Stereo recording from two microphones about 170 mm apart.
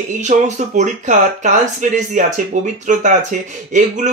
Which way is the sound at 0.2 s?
45° right (ahead or behind).